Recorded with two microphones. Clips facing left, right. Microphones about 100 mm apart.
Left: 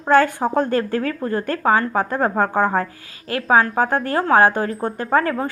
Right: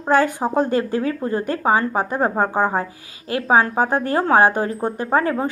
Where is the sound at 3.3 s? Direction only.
30° right (ahead or behind).